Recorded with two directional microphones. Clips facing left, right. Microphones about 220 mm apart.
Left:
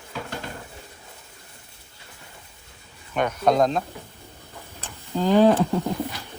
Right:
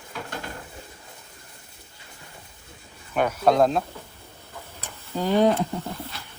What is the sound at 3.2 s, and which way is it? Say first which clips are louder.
Speech: right 1 dB; 5° right (ahead or behind).